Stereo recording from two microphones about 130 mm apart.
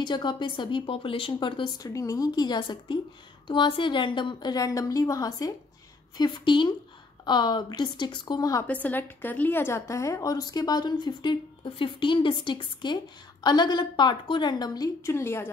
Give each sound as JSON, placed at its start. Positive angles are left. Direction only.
{"t": 0.0, "sound": "a woman's voice", "side_deg": 35}
{"t": 1.8, "sound": "a woman's voice", "side_deg": 25}
{"t": 8.8, "sound": "a woman's voice", "side_deg": 15}
{"t": 15.0, "sound": "a woman's voice", "side_deg": 20}